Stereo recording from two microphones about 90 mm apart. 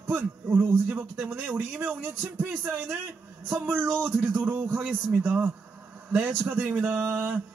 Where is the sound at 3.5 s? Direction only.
20° right (ahead or behind).